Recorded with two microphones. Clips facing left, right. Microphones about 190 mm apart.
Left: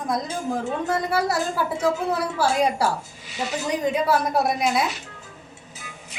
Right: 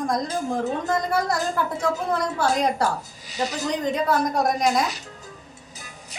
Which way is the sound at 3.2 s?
40° right (ahead or behind).